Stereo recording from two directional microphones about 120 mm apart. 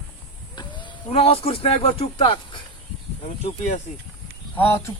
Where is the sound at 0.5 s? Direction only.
40° left (ahead or behind).